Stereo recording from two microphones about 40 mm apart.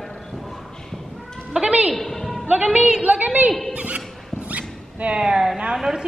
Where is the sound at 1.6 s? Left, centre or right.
Right.